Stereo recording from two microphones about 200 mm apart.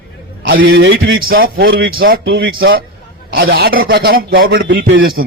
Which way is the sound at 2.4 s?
75° right (ahead or behind).